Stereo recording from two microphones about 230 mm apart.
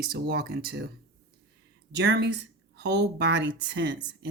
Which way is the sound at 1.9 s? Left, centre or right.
Right.